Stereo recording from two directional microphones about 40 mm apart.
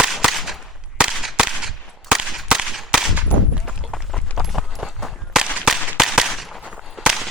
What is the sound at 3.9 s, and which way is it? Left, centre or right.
Run, centre.